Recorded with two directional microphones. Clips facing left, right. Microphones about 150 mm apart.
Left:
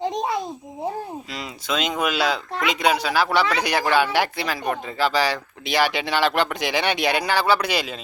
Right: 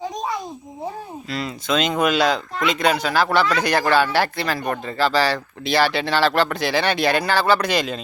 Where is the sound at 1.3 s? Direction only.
15° left (ahead or behind).